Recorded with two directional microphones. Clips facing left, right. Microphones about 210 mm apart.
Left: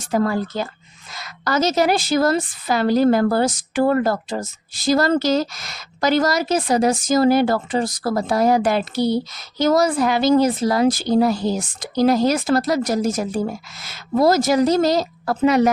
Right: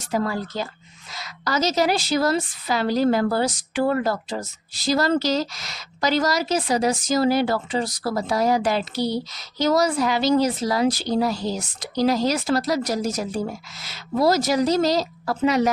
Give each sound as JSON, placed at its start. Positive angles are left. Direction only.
{"t": 0.1, "sound": "a woman's voice", "side_deg": 50}